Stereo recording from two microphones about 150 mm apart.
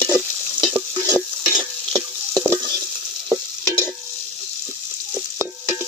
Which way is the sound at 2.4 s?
20° right (ahead or behind).